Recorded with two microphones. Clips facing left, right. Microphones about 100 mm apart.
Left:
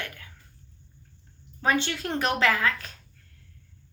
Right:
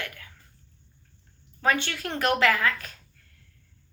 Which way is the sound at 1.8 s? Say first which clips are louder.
Even; 25° left (ahead or behind).